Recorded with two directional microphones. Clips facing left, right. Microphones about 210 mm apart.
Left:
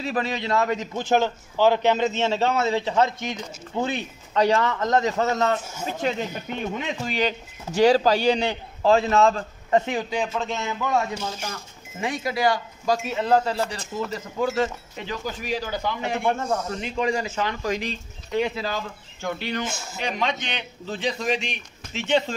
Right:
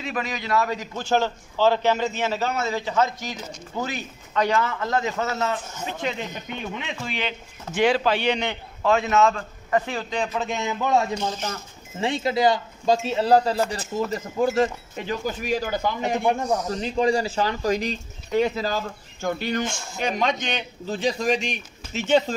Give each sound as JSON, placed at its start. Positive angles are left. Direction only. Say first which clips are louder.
{"t": 0.0, "sound": "a man's voice", "louder": "left 3 dB", "side_deg": 35}
{"t": 10.0, "sound": "a man's voice", "louder": "even", "side_deg": 5}
{"t": 10.5, "sound": "a man's voice", "louder": "right 5 dB", "side_deg": -20}
{"t": 16.3, "sound": "speech", "louder": "right 1 dB", "side_deg": -15}
{"t": 16.6, "sound": "speech", "louder": "right 3 dB", "side_deg": -30}
{"t": 19.6, "sound": "a man's voice", "louder": "right 2 dB", "side_deg": 5}
{"t": 20.0, "sound": "a man's voice", "louder": "right 3 dB", "side_deg": -45}